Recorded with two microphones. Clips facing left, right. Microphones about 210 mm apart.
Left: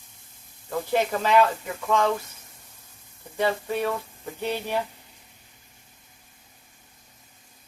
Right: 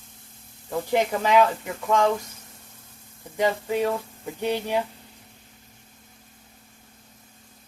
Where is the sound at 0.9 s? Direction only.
15° right (ahead or behind).